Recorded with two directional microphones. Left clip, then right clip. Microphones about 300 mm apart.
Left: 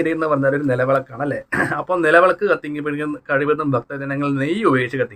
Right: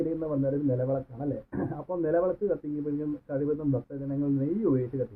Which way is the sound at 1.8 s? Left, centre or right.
Left.